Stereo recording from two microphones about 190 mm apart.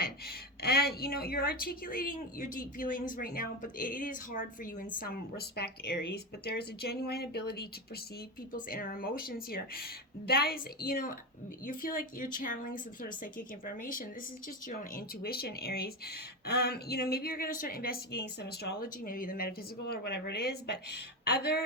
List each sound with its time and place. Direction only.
0.0 s a woman's voice: 55° left (ahead or behind)